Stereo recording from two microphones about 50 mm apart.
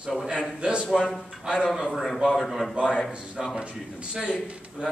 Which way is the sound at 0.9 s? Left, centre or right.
Centre.